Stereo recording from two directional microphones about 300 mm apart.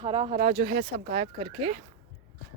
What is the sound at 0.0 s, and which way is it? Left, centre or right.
Speech, centre.